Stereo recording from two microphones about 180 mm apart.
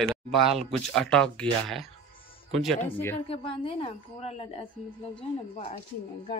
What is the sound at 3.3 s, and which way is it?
A woman's voice, 30° left (ahead or behind).